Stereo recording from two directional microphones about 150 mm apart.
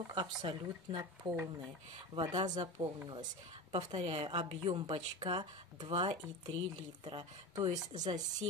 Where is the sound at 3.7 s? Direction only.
45° right (ahead or behind).